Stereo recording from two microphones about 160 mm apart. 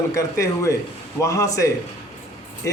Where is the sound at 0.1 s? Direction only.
20° left (ahead or behind).